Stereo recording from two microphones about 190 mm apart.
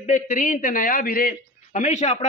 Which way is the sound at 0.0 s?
40° left (ahead or behind).